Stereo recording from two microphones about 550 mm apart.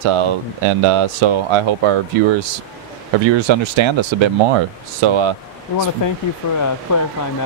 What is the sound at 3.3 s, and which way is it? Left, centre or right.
Speech, right.